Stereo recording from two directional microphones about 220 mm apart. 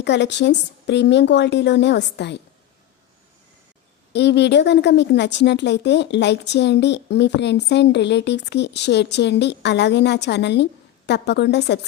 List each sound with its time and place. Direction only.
0.0 s a woman's voice: 50° left (ahead or behind)
4.1 s a woman's voice: 50° left (ahead or behind)